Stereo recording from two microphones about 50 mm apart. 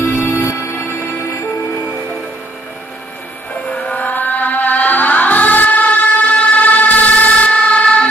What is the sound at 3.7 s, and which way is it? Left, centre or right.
Music, left.